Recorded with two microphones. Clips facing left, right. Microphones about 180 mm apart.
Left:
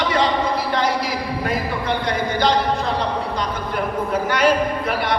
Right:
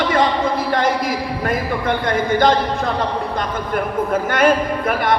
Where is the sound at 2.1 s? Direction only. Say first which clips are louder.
Right 5 dB; 50° right (ahead or behind).